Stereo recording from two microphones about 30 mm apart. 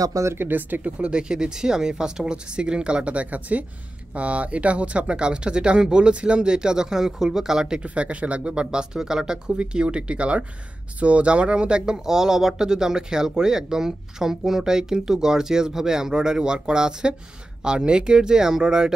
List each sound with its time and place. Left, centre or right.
0.5 s speech: right
0.8 s speech: right
1.3 s speech: right
2.5 s speech: right
4.1 s speech: right; by 7.8 s centre
7.9 s speech: right
8.9 s speech: right